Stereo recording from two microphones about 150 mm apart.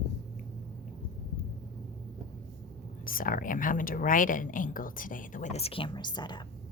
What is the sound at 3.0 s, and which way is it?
A woman's voice, 70° left (ahead or behind).